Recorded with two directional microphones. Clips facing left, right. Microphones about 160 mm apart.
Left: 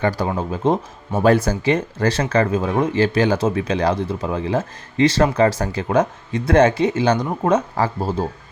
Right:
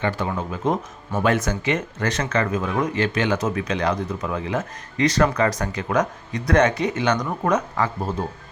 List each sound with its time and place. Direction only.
0.0 s speech: 35° left (ahead or behind)